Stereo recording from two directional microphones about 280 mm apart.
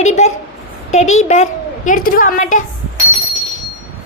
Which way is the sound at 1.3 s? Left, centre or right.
Left.